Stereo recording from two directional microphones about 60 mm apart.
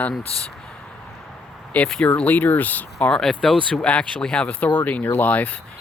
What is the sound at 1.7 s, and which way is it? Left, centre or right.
Speech, left.